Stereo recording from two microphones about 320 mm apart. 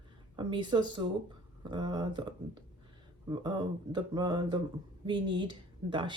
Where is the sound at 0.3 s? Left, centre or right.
Centre.